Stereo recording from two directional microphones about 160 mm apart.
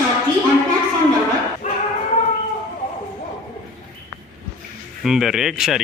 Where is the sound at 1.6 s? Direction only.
45° left (ahead or behind).